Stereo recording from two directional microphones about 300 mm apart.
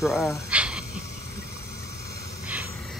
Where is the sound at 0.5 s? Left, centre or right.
Centre.